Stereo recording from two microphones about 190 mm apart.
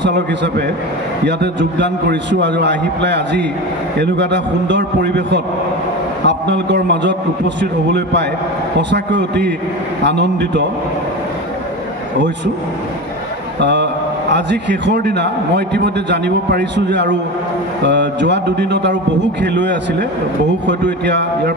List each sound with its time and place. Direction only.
0.0 s a man's voice: 65° right (ahead or behind)
13.6 s a man's voice: 65° right (ahead or behind)